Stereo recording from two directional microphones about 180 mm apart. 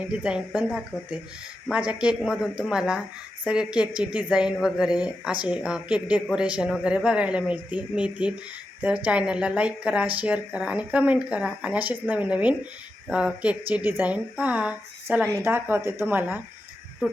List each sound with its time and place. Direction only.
0.0 s speech: 5° right (ahead or behind)